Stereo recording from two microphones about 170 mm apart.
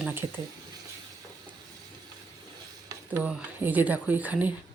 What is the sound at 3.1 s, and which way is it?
Speech, 10° right (ahead or behind).